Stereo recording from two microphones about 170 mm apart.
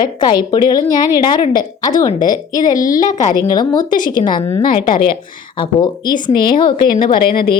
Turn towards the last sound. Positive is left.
turn(degrees=60)  # may be behind; listen again after turning